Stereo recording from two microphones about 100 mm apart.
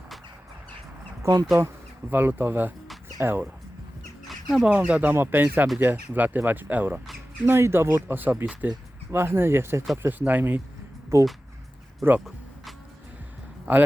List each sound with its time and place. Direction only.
1.2 s speech: 35° right (ahead or behind)
1.5 s insect: 30° right (ahead or behind)
2.1 s speech: 20° right (ahead or behind)
4.3 s bird: centre (ahead or behind)
4.7 s speech: 15° right (ahead or behind)
11.1 s speech: 30° right (ahead or behind)
13.7 s speech: 15° right (ahead or behind)